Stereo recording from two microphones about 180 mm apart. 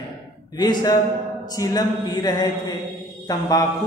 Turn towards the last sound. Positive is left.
turn(degrees=20)  # may be behind; listen again after turning